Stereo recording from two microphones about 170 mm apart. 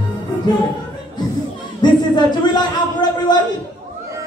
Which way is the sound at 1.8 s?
25° left (ahead or behind).